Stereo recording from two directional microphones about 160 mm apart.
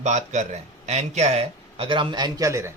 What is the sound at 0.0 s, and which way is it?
Speech, 45° right (ahead or behind).